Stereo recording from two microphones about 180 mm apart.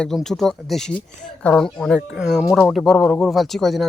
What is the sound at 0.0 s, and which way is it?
Speech, centre (ahead or behind).